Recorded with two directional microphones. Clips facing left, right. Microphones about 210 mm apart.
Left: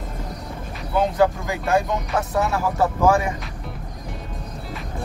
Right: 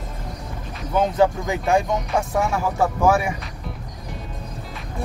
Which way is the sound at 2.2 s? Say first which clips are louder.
Left 1 dB; 10° right (ahead or behind).